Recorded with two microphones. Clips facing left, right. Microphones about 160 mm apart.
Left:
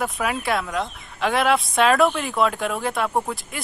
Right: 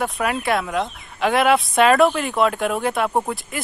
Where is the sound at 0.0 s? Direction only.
Centre (ahead or behind).